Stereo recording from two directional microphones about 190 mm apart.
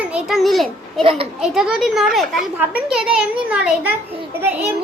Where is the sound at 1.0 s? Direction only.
30° right (ahead or behind).